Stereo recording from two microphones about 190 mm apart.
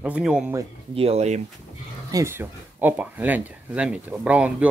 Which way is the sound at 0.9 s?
30° right (ahead or behind).